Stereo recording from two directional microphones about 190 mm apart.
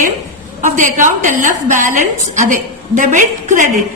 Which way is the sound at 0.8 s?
40° right (ahead or behind).